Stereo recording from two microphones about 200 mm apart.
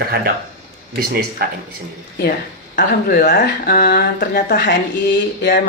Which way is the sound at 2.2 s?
50° left (ahead or behind).